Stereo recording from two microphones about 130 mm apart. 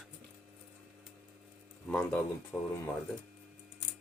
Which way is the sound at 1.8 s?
10° left (ahead or behind).